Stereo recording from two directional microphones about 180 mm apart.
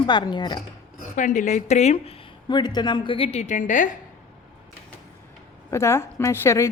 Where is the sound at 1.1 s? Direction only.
45° left (ahead or behind).